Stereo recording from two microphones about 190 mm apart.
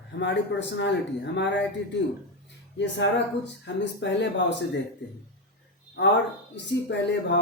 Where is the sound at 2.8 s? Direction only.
65° left (ahead or behind).